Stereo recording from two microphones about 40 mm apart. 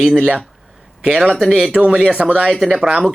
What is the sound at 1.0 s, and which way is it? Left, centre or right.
Speech, right.